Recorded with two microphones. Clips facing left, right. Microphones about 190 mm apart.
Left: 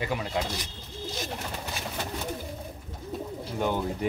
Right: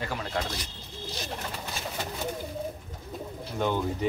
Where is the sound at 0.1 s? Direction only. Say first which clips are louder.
Left 3 dB; 10° left (ahead or behind).